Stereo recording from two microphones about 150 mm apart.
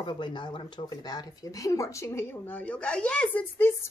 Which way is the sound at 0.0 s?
30° left (ahead or behind).